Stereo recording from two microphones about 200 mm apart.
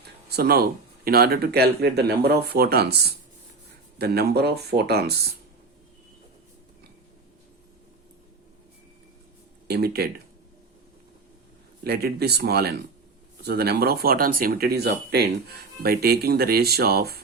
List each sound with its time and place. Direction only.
0.0 s speech: 55° right (ahead or behind)
9.6 s speech: 50° right (ahead or behind)
11.8 s speech: 50° right (ahead or behind)